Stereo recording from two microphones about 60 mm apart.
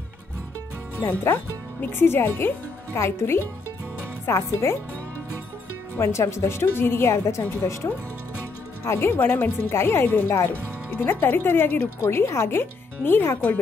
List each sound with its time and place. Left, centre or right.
1.2 s speech: left
5.9 s speech: left
8.8 s speech: left
12.0 s speech: left